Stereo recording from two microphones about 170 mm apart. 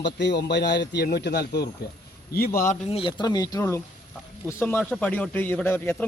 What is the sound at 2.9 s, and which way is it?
Speech, 30° left (ahead or behind).